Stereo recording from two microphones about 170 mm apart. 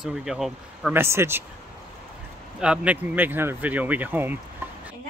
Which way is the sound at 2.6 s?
5° right (ahead or behind).